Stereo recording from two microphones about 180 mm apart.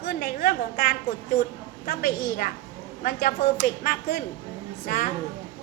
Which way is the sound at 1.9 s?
55° left (ahead or behind).